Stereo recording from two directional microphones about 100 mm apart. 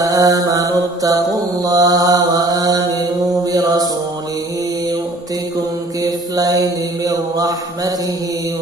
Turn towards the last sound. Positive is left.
turn(degrees=-40)  # may be behind; listen again after turning